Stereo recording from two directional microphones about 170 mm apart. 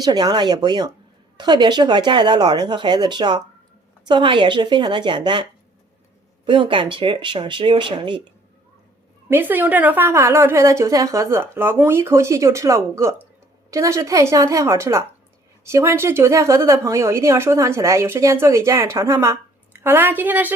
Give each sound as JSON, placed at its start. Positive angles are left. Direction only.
{"t": 0.0, "sound": "speech", "side_deg": -25}
{"t": 9.3, "sound": "speech", "side_deg": -10}